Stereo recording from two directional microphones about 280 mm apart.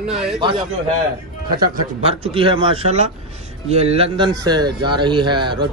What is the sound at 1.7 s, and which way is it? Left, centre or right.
A man's voice, right.